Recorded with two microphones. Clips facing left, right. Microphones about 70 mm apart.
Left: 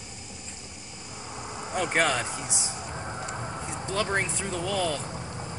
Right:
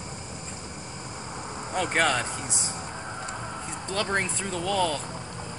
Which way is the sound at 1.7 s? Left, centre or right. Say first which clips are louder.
Right 1 dB; centre.